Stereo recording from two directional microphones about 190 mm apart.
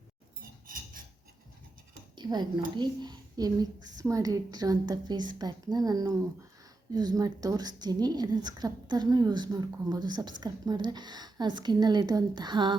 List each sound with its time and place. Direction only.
2.1 s a woman's voice: 20° right (ahead or behind)